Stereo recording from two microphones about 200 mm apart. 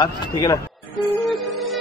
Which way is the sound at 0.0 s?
20° left (ahead or behind).